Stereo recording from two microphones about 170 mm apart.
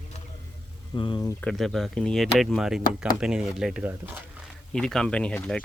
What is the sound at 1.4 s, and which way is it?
Speech, 5° left (ahead or behind).